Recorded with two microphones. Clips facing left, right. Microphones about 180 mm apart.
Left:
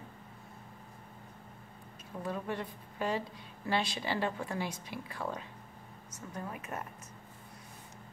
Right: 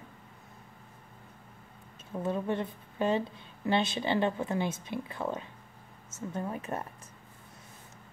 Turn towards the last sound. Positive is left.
turn(degrees=-30)  # may be behind; listen again after turning